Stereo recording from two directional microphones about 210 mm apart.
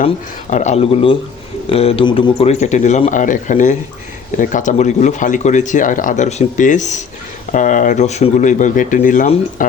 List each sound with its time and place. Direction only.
0.5 s speech: 35° left (ahead or behind)